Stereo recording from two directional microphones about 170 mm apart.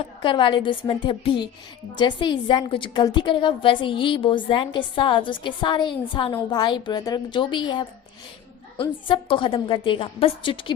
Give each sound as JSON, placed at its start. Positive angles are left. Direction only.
{"t": 0.2, "sound": "a woman's voice", "side_deg": 30}